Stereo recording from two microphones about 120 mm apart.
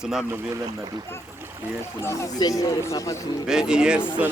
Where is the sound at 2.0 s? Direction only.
25° left (ahead or behind).